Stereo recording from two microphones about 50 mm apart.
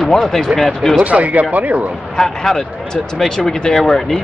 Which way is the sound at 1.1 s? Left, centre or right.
Right.